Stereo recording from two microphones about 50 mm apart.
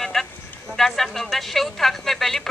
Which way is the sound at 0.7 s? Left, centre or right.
Centre.